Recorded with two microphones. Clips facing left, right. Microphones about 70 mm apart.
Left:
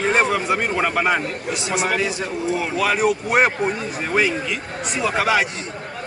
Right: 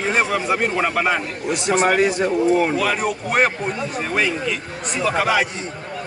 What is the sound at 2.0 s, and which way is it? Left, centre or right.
Speech, right.